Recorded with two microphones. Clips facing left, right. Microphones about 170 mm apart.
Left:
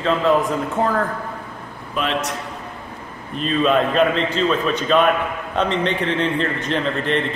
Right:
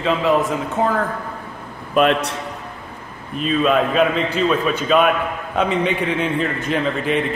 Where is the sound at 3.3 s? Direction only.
5° right (ahead or behind).